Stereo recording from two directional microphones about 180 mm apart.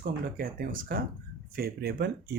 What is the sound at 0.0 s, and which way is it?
Speech, 55° right (ahead or behind).